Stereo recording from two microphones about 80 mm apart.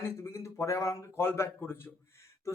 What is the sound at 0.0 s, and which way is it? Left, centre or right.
Speech, left.